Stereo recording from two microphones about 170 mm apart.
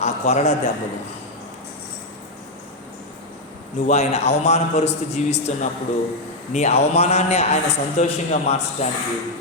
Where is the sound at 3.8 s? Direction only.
40° left (ahead or behind).